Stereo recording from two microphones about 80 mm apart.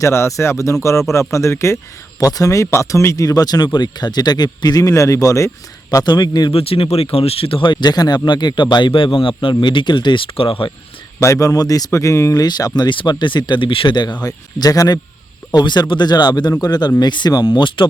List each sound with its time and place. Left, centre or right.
0.0 s speech: left
2.1 s speech: left
5.9 s speech: left
7.6 s speech: left
8.3 s speech: left
11.2 s speech: left
12.4 s speech: left
17.0 s speech: left